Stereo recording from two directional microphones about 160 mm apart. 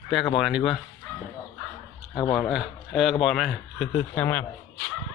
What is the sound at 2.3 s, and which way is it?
A man's voice, centre (ahead or behind).